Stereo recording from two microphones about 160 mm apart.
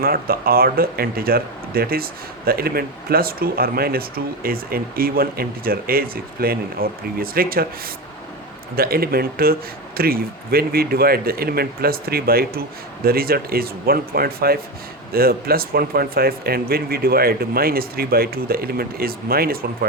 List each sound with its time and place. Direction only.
0.0 s speech: 70° right (ahead or behind)
8.7 s speech: 70° right (ahead or behind)